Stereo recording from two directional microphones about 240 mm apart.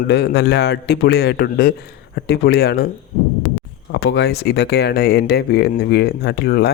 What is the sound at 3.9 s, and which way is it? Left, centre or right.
Speech, left.